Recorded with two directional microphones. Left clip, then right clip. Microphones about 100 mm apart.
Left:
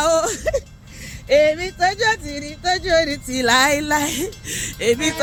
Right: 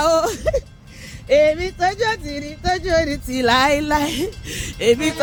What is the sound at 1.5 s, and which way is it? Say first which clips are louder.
Speech: even; 50° right (ahead or behind).